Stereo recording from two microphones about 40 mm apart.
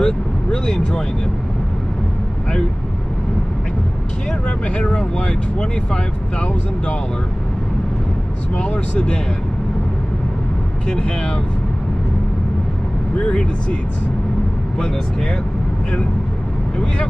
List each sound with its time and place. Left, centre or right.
0.0 s vehicle: centre
4.7 s speech: left
8.5 s speech: left
10.9 s speech: centre
13.3 s speech: left